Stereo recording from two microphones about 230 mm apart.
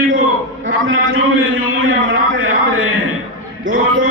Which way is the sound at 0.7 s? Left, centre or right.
Right.